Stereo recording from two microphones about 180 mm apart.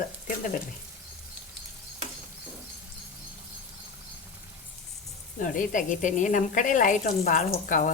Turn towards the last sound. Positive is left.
turn(degrees=45)  # may be behind; listen again after turning